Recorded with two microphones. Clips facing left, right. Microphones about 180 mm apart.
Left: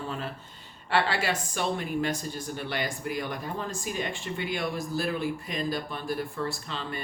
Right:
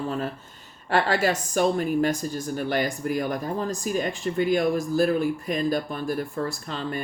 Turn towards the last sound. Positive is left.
turn(degrees=-45)  # may be behind; listen again after turning